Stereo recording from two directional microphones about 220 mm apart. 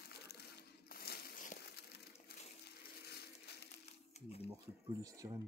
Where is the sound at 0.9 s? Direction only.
45° left (ahead or behind).